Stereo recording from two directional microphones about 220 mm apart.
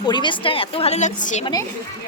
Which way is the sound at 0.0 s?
20° left (ahead or behind).